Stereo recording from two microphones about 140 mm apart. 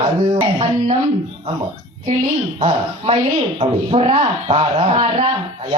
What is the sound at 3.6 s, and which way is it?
Speech, 50° right (ahead or behind).